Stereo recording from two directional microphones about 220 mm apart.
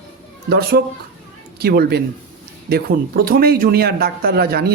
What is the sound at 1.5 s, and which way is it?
Speech, 45° right (ahead or behind).